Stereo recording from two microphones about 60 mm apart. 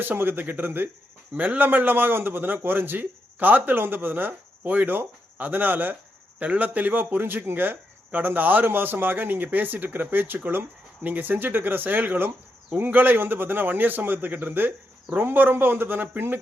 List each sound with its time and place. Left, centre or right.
0.0 s speech: right